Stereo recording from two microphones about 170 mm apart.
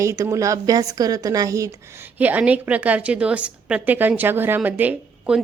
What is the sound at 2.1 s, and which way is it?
A woman's voice, 10° right (ahead or behind).